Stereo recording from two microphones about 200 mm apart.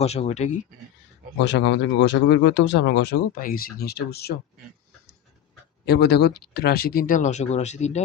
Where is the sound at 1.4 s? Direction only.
65° left (ahead or behind).